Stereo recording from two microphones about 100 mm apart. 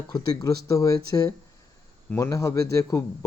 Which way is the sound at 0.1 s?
40° left (ahead or behind).